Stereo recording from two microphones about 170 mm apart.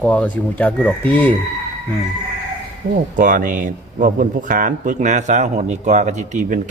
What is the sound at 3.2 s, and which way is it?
Speech, 50° right (ahead or behind).